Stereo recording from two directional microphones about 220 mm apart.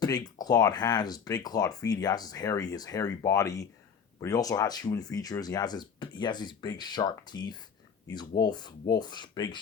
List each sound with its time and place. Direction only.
0.0 s speech: 15° left (ahead or behind)